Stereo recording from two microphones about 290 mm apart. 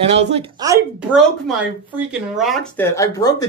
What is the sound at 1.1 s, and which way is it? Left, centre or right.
Speech, centre.